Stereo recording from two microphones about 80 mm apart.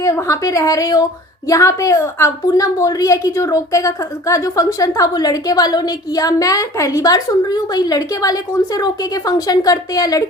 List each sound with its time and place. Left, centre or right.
0.0 s a woman's voice: left